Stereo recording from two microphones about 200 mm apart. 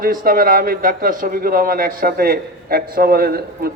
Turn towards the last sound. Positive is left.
turn(degrees=-50)  # may be behind; listen again after turning